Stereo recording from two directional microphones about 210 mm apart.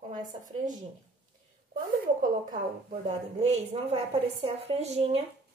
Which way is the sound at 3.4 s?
30° right (ahead or behind).